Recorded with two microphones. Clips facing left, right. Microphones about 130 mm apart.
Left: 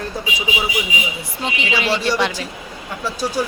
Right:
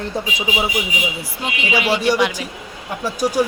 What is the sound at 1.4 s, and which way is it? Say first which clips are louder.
A woman's voice: right 1 dB; 10° right (ahead or behind).